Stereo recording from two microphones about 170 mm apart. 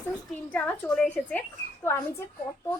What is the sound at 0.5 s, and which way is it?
Speech, 5° left (ahead or behind).